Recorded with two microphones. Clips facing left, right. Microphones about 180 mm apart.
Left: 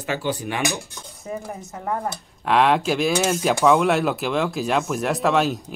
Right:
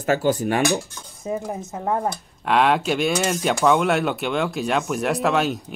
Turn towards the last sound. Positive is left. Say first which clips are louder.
# left 1 dB
turn(degrees=0)  # may be behind; listen again after turning